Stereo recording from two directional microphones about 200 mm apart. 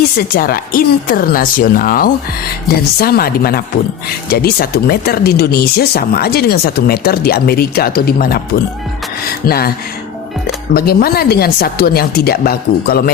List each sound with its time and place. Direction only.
0.2 s speech: 45° left (ahead or behind)
9.5 s speech: 50° left (ahead or behind)